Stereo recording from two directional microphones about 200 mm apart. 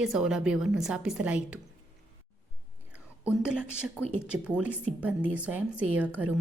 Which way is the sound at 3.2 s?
5° right (ahead or behind).